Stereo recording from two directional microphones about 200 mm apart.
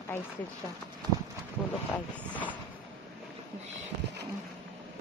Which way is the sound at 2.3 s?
10° left (ahead or behind).